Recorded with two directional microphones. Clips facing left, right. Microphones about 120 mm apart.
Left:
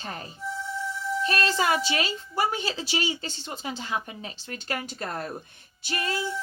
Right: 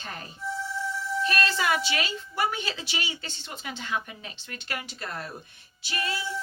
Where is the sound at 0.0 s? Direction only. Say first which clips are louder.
Left 1 dB; 30° left (ahead or behind).